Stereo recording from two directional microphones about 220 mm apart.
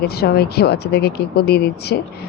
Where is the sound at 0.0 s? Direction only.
45° left (ahead or behind).